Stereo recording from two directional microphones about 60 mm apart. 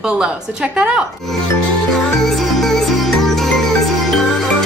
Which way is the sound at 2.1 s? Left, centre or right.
Centre.